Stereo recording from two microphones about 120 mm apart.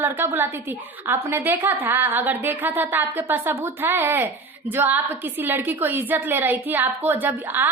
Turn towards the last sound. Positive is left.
turn(degrees=-15)  # may be behind; listen again after turning